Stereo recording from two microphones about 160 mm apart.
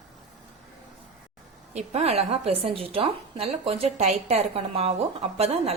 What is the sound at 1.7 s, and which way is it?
A woman's voice, 40° right (ahead or behind).